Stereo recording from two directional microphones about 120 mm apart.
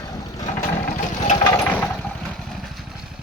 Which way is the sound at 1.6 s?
15° left (ahead or behind).